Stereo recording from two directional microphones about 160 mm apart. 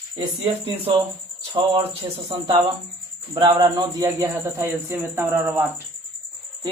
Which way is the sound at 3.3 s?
25° right (ahead or behind).